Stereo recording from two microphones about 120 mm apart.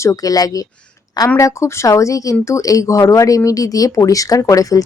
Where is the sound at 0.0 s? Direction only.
30° left (ahead or behind).